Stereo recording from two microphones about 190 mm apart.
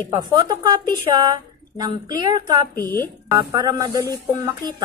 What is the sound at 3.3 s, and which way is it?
A woman's voice, 20° right (ahead or behind).